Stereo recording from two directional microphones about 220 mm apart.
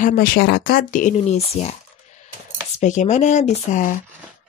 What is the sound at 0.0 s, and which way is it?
Speech, 40° left (ahead or behind).